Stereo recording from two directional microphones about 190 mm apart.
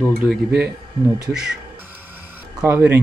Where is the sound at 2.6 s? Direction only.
10° right (ahead or behind).